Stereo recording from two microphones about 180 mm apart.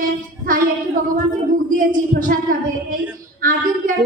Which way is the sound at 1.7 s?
50° right (ahead or behind).